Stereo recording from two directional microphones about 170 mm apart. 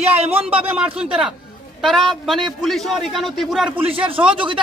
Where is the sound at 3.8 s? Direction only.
35° right (ahead or behind).